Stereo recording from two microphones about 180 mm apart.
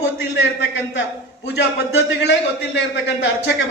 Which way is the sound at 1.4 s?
70° left (ahead or behind).